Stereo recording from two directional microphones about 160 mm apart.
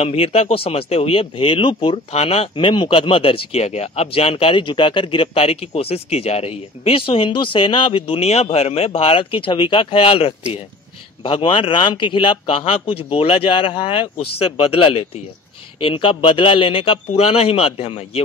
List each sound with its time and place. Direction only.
0.0 s speech: 40° left (ahead or behind)
15.8 s speech: 30° left (ahead or behind)